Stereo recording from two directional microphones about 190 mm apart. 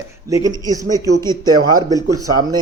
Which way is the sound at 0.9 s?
15° left (ahead or behind).